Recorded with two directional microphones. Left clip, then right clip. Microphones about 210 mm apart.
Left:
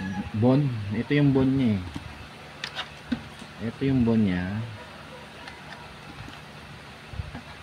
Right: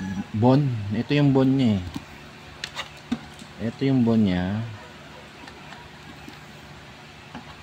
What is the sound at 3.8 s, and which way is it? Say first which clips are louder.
Speech: right 2 dB; 20° right (ahead or behind).